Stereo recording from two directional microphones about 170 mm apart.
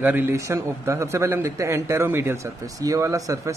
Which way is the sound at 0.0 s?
10° right (ahead or behind).